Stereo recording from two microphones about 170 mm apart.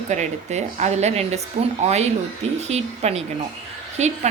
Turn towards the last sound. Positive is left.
turn(degrees=-40)  # may be behind; listen again after turning